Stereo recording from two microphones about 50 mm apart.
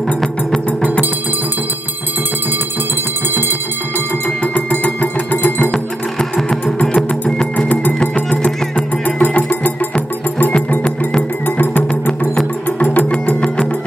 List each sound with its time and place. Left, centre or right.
4.4 s music: left
5.7 s music: centre
7.5 s music: left
11.4 s music: left
11.9 s music: centre
12.7 s music: left